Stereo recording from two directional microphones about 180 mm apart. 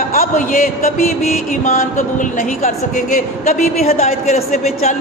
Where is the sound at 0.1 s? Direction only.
50° left (ahead or behind).